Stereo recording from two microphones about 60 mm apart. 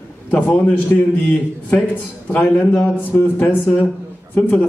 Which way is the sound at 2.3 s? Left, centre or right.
Left.